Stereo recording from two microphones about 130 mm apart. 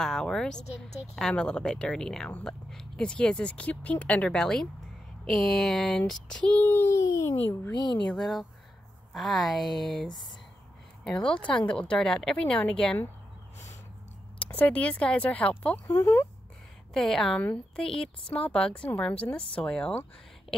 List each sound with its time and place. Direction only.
0.0 s a woman's voice: 5° left (ahead or behind)
0.8 s a woman's voice: 55° left (ahead or behind)
1.1 s speech: 5° left (ahead or behind)
7.7 s a woman's voice: 35° left (ahead or behind)
8.1 s a woman's voice: centre (ahead or behind)
11.2 s speech: 5° left (ahead or behind)
14.4 s speech: 10° left (ahead or behind)
15.9 s speech: 20° left (ahead or behind)
16.9 s a woman's voice: 5° left (ahead or behind)